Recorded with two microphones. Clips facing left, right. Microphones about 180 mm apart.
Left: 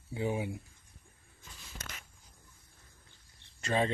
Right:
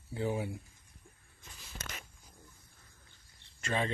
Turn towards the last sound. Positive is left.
turn(degrees=35)  # may be behind; listen again after turning